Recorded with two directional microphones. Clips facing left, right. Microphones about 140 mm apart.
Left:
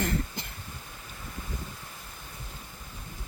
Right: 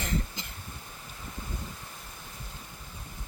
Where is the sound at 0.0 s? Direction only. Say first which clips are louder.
Left 3 dB; 55° left (ahead or behind).